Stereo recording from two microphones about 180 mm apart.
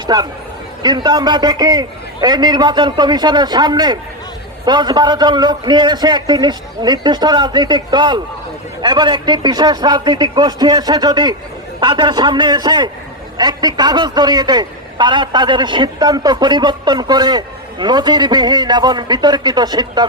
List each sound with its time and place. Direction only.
0.1 s a man's voice: 20° right (ahead or behind)